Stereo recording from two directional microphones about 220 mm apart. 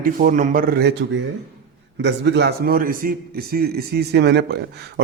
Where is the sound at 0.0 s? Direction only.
40° right (ahead or behind).